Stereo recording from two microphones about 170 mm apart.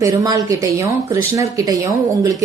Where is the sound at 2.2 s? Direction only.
20° right (ahead or behind).